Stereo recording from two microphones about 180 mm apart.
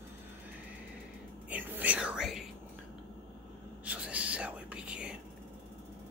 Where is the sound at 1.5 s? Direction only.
10° right (ahead or behind).